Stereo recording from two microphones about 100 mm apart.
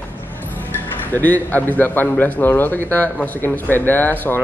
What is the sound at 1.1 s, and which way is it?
A man's voice, 15° left (ahead or behind).